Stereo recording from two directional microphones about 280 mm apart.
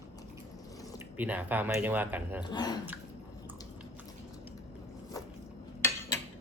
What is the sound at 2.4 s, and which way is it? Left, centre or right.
Speech, centre.